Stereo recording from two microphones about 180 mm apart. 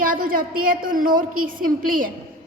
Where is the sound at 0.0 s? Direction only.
50° right (ahead or behind).